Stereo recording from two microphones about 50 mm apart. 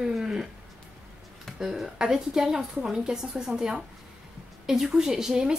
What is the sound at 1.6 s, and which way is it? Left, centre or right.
A woman's voice, centre.